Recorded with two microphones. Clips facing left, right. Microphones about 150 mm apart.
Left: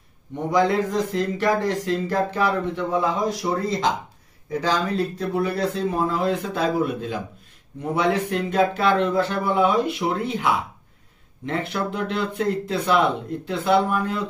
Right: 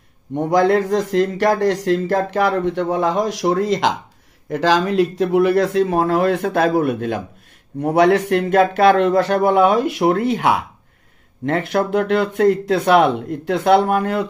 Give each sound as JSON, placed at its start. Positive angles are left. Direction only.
{"t": 0.3, "sound": "speech", "side_deg": -60}